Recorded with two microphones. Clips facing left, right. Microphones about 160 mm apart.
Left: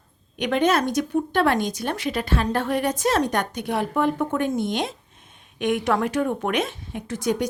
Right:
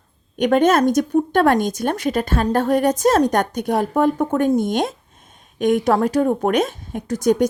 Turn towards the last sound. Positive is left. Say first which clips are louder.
# right 7 dB
turn(degrees=-45)  # may be behind; listen again after turning